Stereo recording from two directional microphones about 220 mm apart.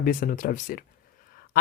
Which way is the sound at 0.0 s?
40° left (ahead or behind).